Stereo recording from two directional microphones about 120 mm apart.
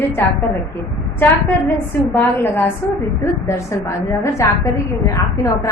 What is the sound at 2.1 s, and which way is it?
A woman's voice, 15° left (ahead or behind).